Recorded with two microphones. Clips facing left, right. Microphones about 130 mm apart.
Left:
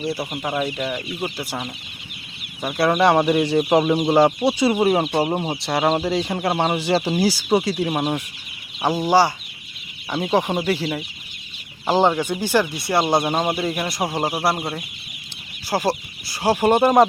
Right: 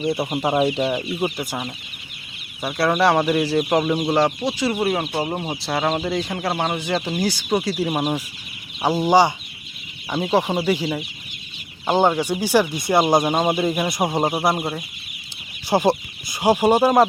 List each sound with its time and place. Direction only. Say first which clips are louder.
0.1 s speech: right 4 dB; 25° right (ahead or behind)
2.6 s speech: left 1 dB; centre (ahead or behind)
3.6 s speech: left 2 dB; 10° left (ahead or behind)
5.6 s speech: left 2 dB; centre (ahead or behind)
6.7 s speech: left 4 dB; 30° left (ahead or behind)
7.2 s speech: left 3 dB; 10° left (ahead or behind); by 9.3 s 15° right (ahead or behind)
10.3 s speech: right 1 dB; 10° right (ahead or behind)
11.9 s speech: even; centre (ahead or behind)
12.1 s speech: right 1 dB; 10° right (ahead or behind)
13.2 s speech: right 2 dB; 5° right (ahead or behind)
14.1 s speech: right 2 dB; 20° right (ahead or behind)
15.7 s speech: right 4 dB; 20° right (ahead or behind); by 17.1 s 5° right (ahead or behind)